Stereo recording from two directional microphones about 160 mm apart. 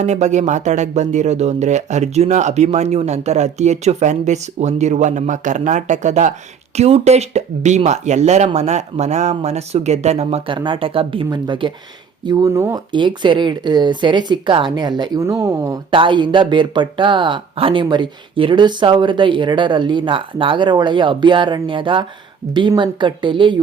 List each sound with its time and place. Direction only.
0.0 s speech: 45° right (ahead or behind); by 12.8 s 15° right (ahead or behind)
12.9 s speech: 30° right (ahead or behind)